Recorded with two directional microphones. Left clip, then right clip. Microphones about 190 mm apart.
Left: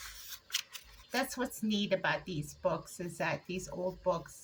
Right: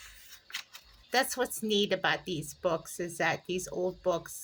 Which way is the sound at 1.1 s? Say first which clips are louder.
Right 6 dB; 45° right (ahead or behind).